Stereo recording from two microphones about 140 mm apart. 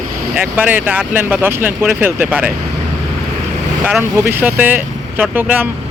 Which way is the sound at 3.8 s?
10° right (ahead or behind).